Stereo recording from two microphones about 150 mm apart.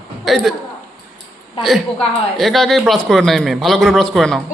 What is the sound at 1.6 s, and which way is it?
Speech, centre (ahead or behind).